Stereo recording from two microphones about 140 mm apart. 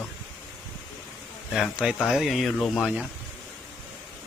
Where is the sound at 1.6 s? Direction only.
Centre (ahead or behind).